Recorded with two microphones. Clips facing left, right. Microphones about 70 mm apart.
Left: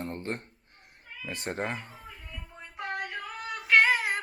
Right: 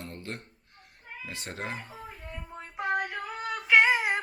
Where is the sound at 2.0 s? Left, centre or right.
Right.